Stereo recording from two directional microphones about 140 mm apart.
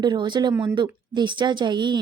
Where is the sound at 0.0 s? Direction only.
35° right (ahead or behind).